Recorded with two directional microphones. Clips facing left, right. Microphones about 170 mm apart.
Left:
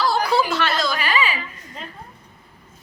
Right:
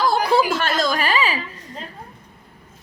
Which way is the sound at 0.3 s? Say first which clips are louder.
Right 2 dB; 50° right (ahead or behind).